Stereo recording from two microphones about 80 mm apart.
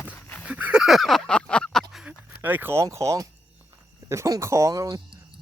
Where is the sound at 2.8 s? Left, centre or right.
Right.